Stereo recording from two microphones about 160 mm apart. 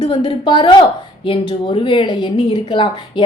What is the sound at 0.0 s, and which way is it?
A woman's voice, 30° left (ahead or behind).